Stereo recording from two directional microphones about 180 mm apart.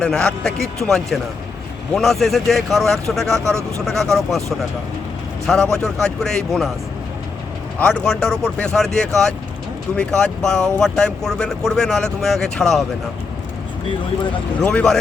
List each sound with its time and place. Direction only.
0.0 s speech: 5° left (ahead or behind)
3.4 s a man's voice: 15° right (ahead or behind)
3.8 s speech: centre (ahead or behind)
7.8 s speech: 5° left (ahead or behind)
14.6 s speech: 5° left (ahead or behind)